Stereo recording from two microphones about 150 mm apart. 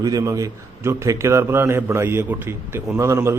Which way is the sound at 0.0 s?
20° right (ahead or behind).